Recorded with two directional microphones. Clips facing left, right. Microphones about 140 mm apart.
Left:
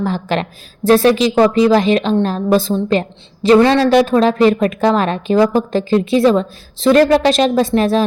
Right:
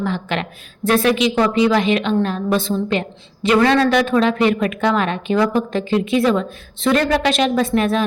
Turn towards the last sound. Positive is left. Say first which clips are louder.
# left 4 dB
turn(degrees=35)  # may be behind; listen again after turning